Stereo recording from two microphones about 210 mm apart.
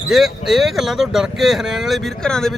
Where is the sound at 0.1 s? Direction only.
Centre (ahead or behind).